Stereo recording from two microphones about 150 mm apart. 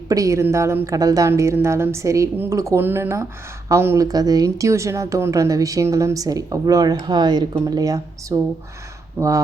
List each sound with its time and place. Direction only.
0.1 s speech: 20° right (ahead or behind)